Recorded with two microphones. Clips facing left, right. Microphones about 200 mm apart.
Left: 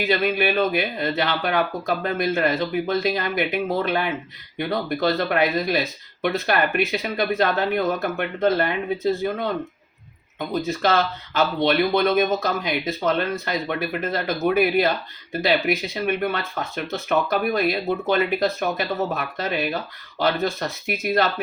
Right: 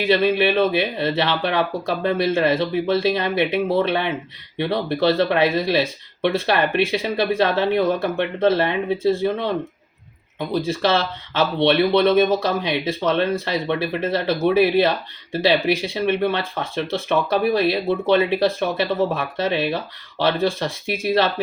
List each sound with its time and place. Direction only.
0.0 s speech: 30° right (ahead or behind)
10.7 s speech: 30° right (ahead or behind)